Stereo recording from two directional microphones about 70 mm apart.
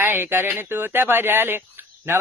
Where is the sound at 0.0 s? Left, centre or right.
Right.